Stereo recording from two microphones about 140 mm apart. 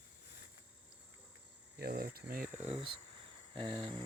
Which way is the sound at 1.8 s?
90° right.